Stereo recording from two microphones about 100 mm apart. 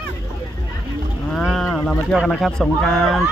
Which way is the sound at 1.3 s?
5° left (ahead or behind).